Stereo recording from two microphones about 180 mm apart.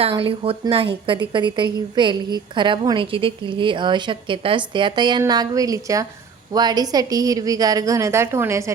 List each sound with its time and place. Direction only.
0.0 s a woman's voice: 30° right (ahead or behind); by 8.7 s 15° right (ahead or behind)